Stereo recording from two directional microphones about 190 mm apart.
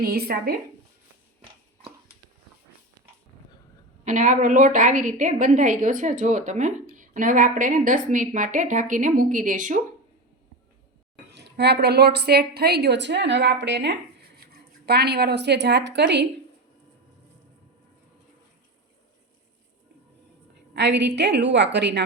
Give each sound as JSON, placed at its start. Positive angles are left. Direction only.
{"t": 0.0, "sound": "a woman's voice", "side_deg": -55}
{"t": 4.0, "sound": "a woman's voice", "side_deg": -40}
{"t": 11.3, "sound": "a woman's voice", "side_deg": -65}
{"t": 20.7, "sound": "a woman's voice", "side_deg": -65}